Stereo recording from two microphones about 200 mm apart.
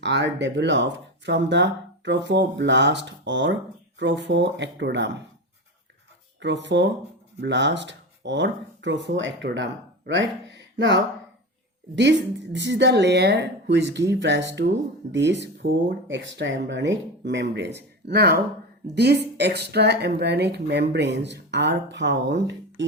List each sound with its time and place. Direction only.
0.0 s speech: 65° right (ahead or behind)
6.4 s speech: 60° right (ahead or behind)
19.4 s speech: 55° right (ahead or behind)